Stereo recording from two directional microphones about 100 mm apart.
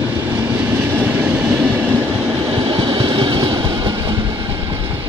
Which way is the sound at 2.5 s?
55° right (ahead or behind).